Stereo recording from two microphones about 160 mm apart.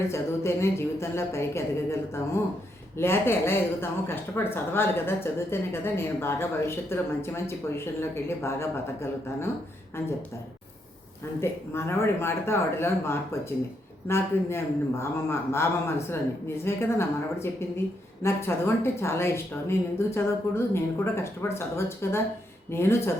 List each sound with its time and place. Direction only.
0.1 s a woman's voice: 15° left (ahead or behind)
11.3 s a woman's voice: 15° left (ahead or behind)